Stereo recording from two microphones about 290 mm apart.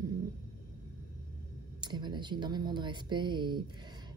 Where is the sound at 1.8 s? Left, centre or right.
Centre.